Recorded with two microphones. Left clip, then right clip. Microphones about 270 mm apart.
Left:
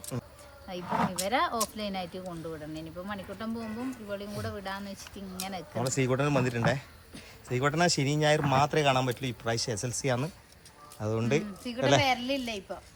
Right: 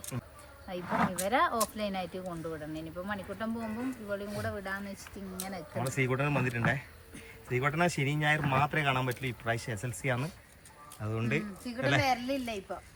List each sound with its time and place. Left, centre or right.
0.1 s a sound: centre
0.9 s speech: left
1.1 s speech: centre